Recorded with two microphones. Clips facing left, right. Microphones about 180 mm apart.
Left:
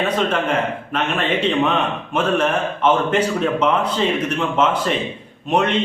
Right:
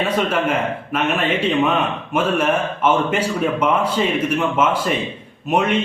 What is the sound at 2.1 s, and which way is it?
Speech, 5° right (ahead or behind).